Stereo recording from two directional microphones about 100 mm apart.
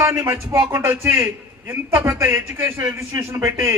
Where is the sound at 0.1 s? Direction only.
30° right (ahead or behind).